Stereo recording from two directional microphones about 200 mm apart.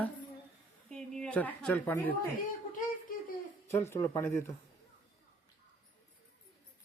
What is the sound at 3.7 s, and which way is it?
Speech, 10° left (ahead or behind).